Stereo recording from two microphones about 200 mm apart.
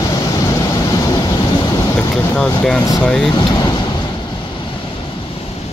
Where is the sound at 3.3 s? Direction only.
20° left (ahead or behind).